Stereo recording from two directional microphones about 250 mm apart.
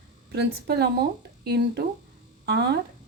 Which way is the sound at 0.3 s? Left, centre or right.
Right.